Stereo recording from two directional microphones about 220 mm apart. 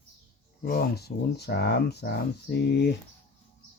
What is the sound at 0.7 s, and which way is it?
Speech, 45° left (ahead or behind).